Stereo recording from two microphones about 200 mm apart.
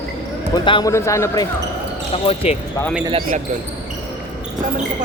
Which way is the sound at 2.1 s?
30° left (ahead or behind).